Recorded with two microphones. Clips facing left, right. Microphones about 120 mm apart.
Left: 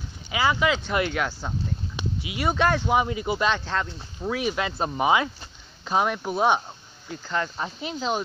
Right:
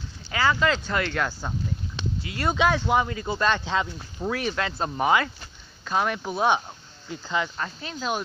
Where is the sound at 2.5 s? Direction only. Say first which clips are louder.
Even; 10° right (ahead or behind).